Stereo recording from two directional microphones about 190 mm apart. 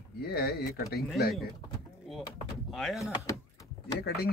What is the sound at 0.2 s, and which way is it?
Speech, 55° left (ahead or behind).